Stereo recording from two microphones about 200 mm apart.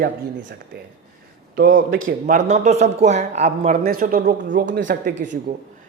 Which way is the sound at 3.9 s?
45° right (ahead or behind).